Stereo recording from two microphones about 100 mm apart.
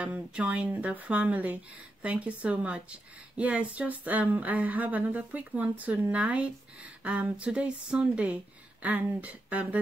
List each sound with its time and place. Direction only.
0.0 s speech: 10° right (ahead or behind)